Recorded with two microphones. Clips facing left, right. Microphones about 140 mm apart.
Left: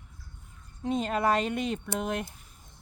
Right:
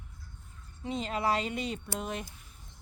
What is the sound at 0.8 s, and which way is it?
Speech, 50° left (ahead or behind).